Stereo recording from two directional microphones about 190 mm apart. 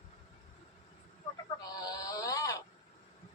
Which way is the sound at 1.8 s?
20° left (ahead or behind).